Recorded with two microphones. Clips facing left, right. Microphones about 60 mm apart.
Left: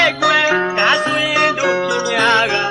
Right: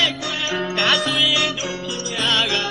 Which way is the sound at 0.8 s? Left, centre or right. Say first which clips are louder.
Left 5 dB; left.